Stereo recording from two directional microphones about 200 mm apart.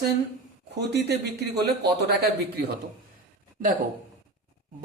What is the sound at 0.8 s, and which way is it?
Speech, 55° right (ahead or behind).